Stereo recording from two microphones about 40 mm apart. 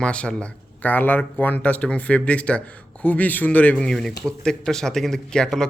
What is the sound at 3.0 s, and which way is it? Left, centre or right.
Speech, left.